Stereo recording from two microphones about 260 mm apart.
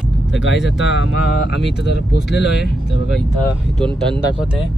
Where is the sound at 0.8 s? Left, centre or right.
Left.